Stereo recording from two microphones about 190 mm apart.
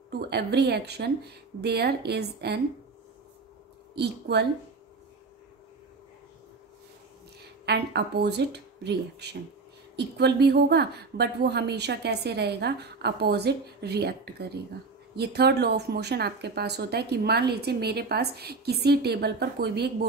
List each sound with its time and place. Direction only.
0.2 s speech: 60° right (ahead or behind)
3.9 s speech: 60° right (ahead or behind)
7.6 s speech: 60° right (ahead or behind)